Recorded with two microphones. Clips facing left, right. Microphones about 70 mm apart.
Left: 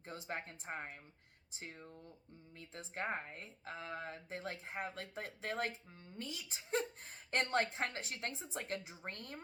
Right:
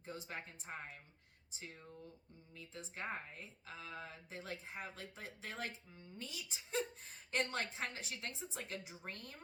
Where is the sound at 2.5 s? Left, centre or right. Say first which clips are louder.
Left 1 dB; left.